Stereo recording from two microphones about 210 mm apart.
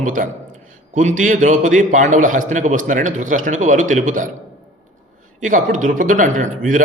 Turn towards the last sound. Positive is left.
turn(degrees=-40)  # may be behind; listen again after turning